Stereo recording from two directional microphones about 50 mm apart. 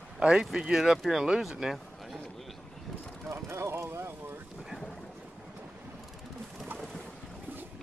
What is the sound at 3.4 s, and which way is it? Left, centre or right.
Speech, right.